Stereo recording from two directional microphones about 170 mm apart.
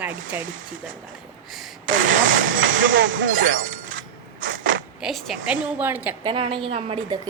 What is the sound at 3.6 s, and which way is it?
Breaking, 50° right (ahead or behind).